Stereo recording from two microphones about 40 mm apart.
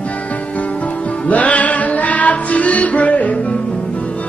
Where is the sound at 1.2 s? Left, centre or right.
Left.